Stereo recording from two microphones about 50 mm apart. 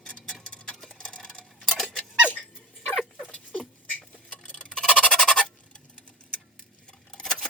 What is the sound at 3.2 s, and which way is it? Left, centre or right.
Rodents, left.